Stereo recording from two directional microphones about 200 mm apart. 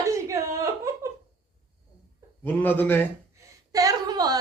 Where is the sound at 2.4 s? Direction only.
10° left (ahead or behind).